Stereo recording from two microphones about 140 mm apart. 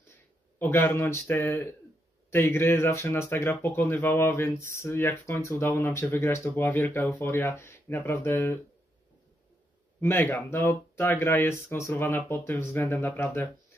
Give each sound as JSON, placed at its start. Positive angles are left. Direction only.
{"t": 0.6, "sound": "speech", "side_deg": 15}
{"t": 9.9, "sound": "speech", "side_deg": 15}